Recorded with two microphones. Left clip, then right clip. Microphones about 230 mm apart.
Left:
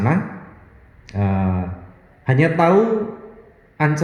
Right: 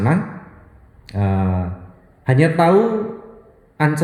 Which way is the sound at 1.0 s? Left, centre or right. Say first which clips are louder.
Right 1 dB; right.